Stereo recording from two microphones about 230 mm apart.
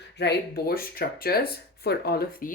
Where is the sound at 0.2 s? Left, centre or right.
Left.